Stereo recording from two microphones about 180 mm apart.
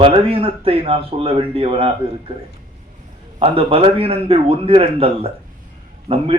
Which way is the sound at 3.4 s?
35° right (ahead or behind).